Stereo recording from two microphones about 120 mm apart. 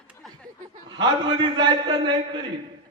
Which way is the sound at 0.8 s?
40° right (ahead or behind).